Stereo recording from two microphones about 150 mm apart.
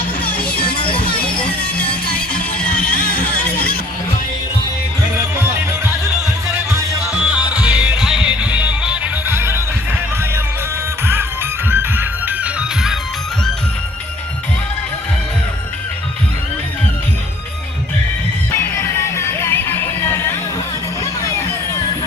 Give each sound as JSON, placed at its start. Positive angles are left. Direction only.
{"t": 0.3, "sound": "music", "side_deg": 10}
{"t": 0.7, "sound": "music", "side_deg": 35}
{"t": 1.8, "sound": "music", "side_deg": 10}
{"t": 2.9, "sound": "music", "side_deg": 80}
{"t": 7.6, "sound": "music", "side_deg": -10}
{"t": 11.0, "sound": "music", "side_deg": -15}
{"t": 18.5, "sound": "music", "side_deg": 15}